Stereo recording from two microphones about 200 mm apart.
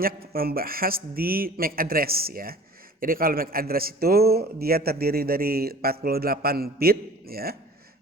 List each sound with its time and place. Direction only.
0.0 s a man's voice: 50° right (ahead or behind)